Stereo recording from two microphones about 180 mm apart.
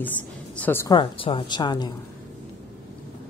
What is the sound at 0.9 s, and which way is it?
A woman's voice, 25° left (ahead or behind).